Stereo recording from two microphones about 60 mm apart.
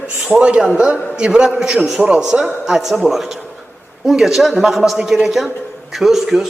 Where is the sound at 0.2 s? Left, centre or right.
Centre.